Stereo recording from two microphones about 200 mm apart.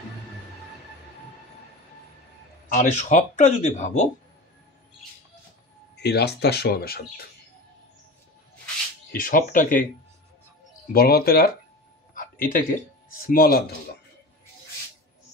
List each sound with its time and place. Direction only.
2.7 s speech: 35° left (ahead or behind)
5.9 s speech: 55° left (ahead or behind)
9.1 s speech: 45° left (ahead or behind)
10.9 s speech: 50° left (ahead or behind)
12.1 s a sound: 45° left (ahead or behind)
13.3 s speech: 50° left (ahead or behind)